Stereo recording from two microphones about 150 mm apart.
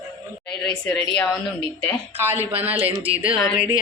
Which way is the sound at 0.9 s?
10° left (ahead or behind).